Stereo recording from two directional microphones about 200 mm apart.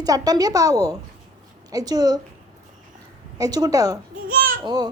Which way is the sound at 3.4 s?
20° right (ahead or behind).